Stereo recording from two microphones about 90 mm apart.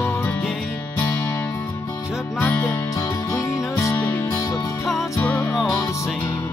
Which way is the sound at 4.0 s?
20° left (ahead or behind).